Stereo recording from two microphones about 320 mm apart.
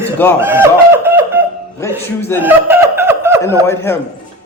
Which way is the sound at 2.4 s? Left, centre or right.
Centre.